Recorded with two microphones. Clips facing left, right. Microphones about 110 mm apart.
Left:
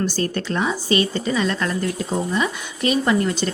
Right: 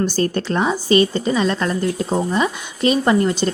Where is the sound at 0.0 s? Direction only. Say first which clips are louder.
Right 4 dB; 35° right (ahead or behind).